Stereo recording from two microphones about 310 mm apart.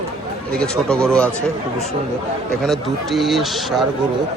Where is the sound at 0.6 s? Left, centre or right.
Centre.